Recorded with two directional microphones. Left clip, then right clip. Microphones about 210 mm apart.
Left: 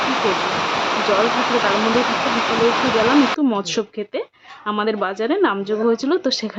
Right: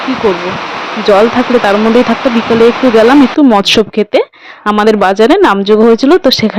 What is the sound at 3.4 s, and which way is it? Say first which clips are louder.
A woman's voice: right 14 dB; 40° right (ahead or behind).